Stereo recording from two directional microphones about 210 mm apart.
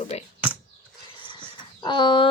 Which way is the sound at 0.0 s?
30° left (ahead or behind).